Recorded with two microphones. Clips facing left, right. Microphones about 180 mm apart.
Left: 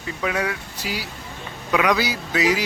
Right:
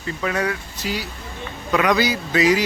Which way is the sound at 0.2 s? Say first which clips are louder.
Right 1 dB; 5° left (ahead or behind).